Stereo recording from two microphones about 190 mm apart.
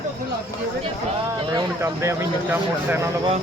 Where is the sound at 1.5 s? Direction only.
15° right (ahead or behind).